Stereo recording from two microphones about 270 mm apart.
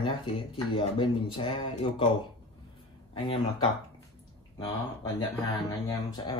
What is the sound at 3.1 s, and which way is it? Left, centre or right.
Speech, centre.